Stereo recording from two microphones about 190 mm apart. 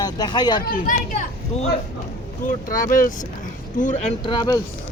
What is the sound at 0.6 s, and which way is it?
Speech, 50° left (ahead or behind).